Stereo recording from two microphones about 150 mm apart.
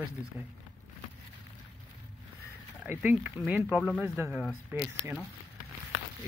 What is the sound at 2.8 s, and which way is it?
Speech, 10° right (ahead or behind).